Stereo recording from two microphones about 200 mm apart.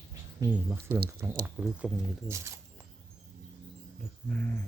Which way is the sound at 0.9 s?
50° right (ahead or behind).